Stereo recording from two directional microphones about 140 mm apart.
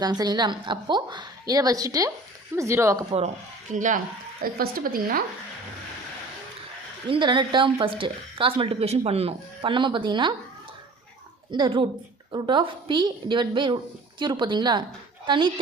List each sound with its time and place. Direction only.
0.0 s a woman's voice: 30° right (ahead or behind)
3.7 s speech: 65° right (ahead or behind); by 5.2 s 90° right
7.1 s speech: 35° right (ahead or behind)
11.5 s speech: 35° right (ahead or behind)